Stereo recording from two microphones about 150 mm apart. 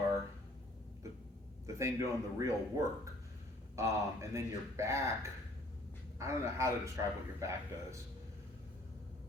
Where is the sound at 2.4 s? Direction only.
20° right (ahead or behind).